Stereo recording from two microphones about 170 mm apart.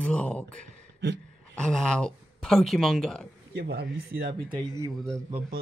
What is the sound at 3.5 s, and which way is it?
Speech, 80° right.